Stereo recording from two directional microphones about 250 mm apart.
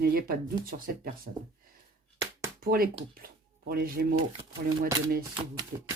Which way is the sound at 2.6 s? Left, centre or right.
Right.